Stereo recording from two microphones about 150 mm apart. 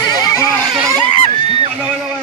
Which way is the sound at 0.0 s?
25° left (ahead or behind).